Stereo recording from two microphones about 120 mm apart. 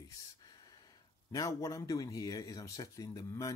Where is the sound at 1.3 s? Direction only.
30° left (ahead or behind).